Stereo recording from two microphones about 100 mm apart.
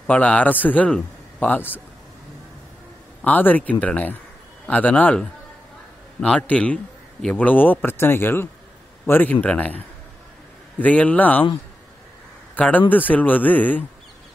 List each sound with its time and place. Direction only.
0.0 s a man's voice: 15° left (ahead or behind)
3.3 s a man's voice: 15° left (ahead or behind)
10.8 s a man's voice: 15° left (ahead or behind)
12.5 s a man's voice: 15° left (ahead or behind)